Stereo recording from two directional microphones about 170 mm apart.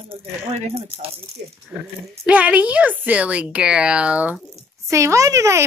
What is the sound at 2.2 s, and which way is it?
Speech, 10° right (ahead or behind).